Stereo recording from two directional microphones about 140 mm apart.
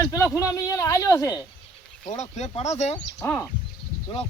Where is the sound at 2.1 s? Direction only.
55° left (ahead or behind).